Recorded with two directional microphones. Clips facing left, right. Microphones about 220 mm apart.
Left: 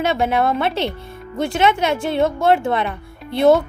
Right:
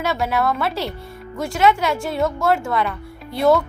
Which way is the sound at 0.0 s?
25° left (ahead or behind).